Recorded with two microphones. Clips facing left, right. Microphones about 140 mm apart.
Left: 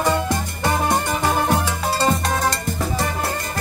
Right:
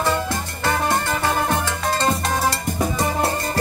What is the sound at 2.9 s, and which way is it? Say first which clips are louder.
Music: right 3 dB; 25° right (ahead or behind).